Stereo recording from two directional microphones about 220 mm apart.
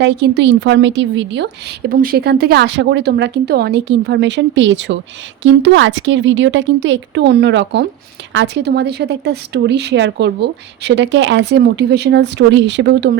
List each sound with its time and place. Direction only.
0.0 s speech: 50° right (ahead or behind)
1.9 s a woman's voice: 40° right (ahead or behind)